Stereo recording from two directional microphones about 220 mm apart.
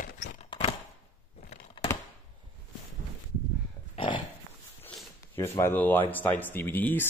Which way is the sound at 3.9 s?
20° left (ahead or behind).